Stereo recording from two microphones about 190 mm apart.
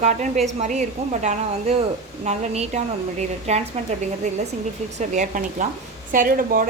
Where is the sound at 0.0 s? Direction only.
40° right (ahead or behind).